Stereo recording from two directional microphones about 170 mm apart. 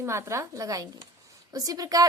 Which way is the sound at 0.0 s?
15° right (ahead or behind).